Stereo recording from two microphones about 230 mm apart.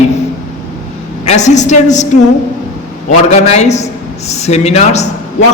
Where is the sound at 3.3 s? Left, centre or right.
Left.